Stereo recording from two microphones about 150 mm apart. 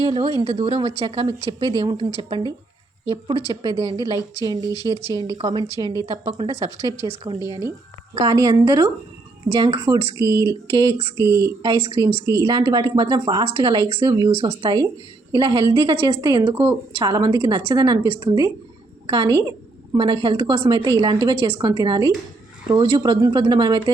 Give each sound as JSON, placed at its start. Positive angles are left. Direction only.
{"t": 0.0, "sound": "speech", "side_deg": -35}
{"t": 2.0, "sound": "a woman's voice", "side_deg": -40}
{"t": 6.5, "sound": "a woman's voice", "side_deg": -20}
{"t": 11.6, "sound": "speech", "side_deg": -40}
{"t": 12.2, "sound": "a woman's voice", "side_deg": -20}
{"t": 17.7, "sound": "a woman's voice", "side_deg": -30}